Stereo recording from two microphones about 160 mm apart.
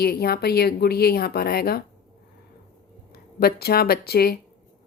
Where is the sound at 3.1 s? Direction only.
75° left (ahead or behind).